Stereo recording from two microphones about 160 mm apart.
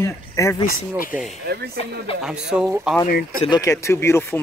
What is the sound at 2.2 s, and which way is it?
Speech, 5° right (ahead or behind).